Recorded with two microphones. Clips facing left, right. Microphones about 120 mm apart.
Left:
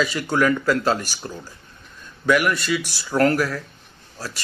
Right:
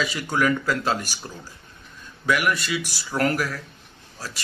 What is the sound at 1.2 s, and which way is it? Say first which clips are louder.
Speech: left 5 dB; 15° right (ahead or behind).